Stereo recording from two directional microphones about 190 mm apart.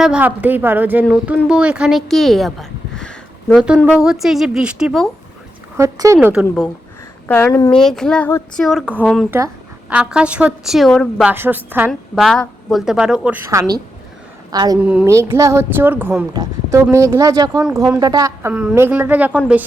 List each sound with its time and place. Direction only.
0.0 s a woman's voice: 5° right (ahead or behind)
5.7 s speech: 15° right (ahead or behind)
6.2 s a woman's voice: 5° right (ahead or behind)
7.3 s speech: 10° left (ahead or behind)
7.7 s a woman's voice: 5° left (ahead or behind)
11.3 s speech: 10° right (ahead or behind)
11.9 s a woman's voice: centre (ahead or behind); by 14.8 s 20° right (ahead or behind)
14.8 s speech: 5° right (ahead or behind)